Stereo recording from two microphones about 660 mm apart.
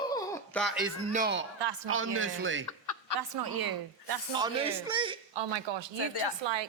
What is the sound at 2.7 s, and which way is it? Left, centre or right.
Chuckle, left.